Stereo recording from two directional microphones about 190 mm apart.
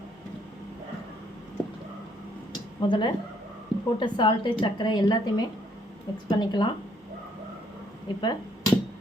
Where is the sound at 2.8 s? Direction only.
25° left (ahead or behind).